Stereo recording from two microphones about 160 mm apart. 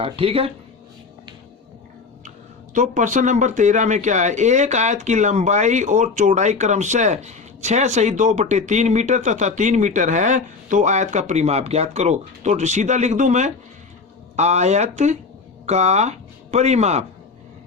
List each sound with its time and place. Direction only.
0.0 s speech: 35° right (ahead or behind)
2.7 s speech: 50° right (ahead or behind)